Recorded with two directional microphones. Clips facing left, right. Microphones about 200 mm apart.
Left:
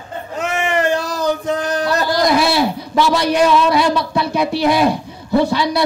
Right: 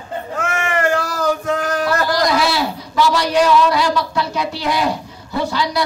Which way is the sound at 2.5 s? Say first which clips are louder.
Left 4 dB; 55° left (ahead or behind).